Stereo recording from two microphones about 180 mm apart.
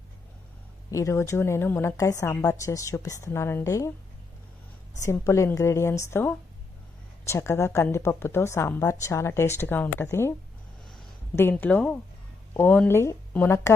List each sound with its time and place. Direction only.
0.9 s a woman's voice: 15° left (ahead or behind)
4.9 s a woman's voice: 15° left (ahead or behind)
11.3 s a woman's voice: 10° left (ahead or behind)